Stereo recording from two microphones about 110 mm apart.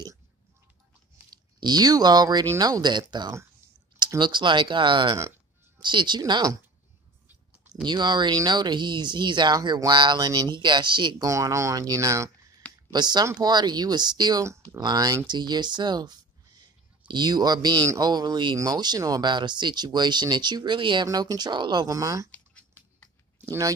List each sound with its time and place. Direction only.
1.3 s speech: 40° right (ahead or behind)
7.8 s speech: 45° right (ahead or behind)
11.2 s speech: 30° right (ahead or behind)
12.9 s speech: 40° right (ahead or behind)
14.4 s speech: 25° right (ahead or behind)
21.9 s speech: 30° right (ahead or behind)
22.3 s a sound: 15° left (ahead or behind)